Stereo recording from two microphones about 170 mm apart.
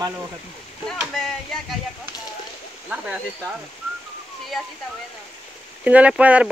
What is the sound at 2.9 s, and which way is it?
Speech, 5° right (ahead or behind).